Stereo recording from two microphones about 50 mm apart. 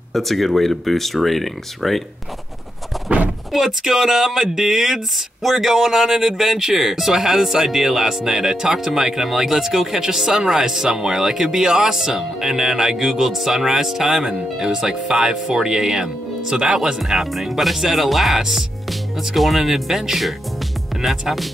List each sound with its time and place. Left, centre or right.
0.1 s speech: centre
3.1 s door: right
3.5 s speech: centre